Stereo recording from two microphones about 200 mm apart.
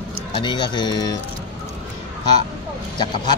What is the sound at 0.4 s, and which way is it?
Speech, 20° left (ahead or behind).